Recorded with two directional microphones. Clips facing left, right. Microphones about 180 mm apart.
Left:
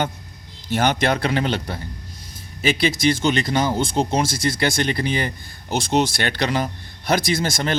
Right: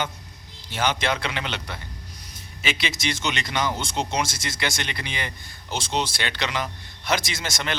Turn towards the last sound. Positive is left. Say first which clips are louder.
# left 8 dB
turn(degrees=45)  # may be behind; listen again after turning